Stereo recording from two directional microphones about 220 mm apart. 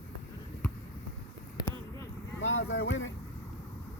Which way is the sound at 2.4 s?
60° left (ahead or behind).